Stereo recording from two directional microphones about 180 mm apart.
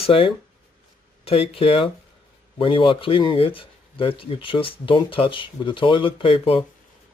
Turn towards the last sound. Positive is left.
turn(degrees=30)  # may be behind; listen again after turning